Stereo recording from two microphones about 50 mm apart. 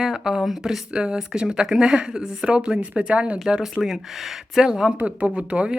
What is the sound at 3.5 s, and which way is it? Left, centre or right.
Speech, centre.